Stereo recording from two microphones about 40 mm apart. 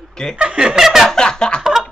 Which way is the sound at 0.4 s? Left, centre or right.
Right.